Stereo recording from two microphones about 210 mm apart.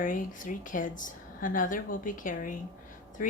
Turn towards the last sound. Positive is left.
turn(degrees=40)  # may be behind; listen again after turning